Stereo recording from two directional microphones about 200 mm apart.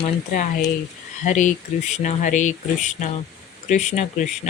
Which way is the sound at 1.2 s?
40° left (ahead or behind).